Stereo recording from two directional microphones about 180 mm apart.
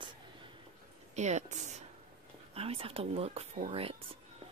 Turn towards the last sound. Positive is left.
turn(degrees=-35)  # may be behind; listen again after turning